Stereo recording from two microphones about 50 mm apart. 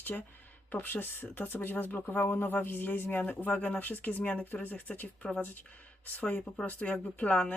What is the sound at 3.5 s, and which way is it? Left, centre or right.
Speech, left.